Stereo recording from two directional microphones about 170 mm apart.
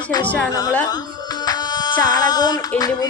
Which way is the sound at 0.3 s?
5° left (ahead or behind).